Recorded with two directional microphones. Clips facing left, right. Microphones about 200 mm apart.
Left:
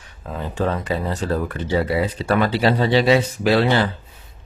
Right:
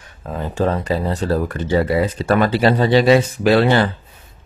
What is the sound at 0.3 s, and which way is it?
Speech, 40° right (ahead or behind).